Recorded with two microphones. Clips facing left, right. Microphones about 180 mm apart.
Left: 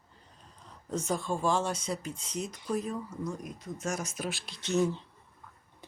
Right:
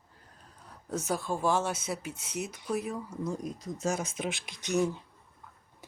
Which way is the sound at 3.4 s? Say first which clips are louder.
Right 4 dB; 35° right (ahead or behind).